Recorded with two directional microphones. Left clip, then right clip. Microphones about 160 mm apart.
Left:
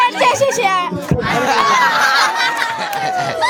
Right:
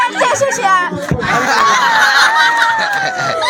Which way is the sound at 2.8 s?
Centre (ahead or behind).